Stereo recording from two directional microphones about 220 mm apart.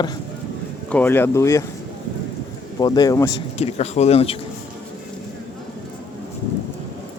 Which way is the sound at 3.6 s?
30° left (ahead or behind).